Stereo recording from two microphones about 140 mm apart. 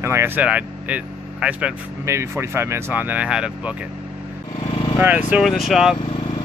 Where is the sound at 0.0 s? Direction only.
15° right (ahead or behind).